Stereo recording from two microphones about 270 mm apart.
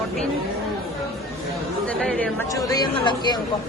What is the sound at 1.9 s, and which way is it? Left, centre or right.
Speech, centre.